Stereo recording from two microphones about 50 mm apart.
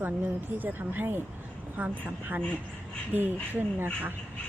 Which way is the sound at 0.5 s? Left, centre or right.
Right.